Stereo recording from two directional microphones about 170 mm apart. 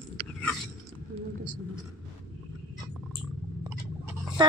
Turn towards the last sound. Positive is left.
turn(degrees=-25)  # may be behind; listen again after turning